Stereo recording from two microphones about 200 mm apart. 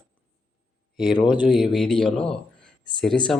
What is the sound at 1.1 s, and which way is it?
Speech, 25° left (ahead or behind).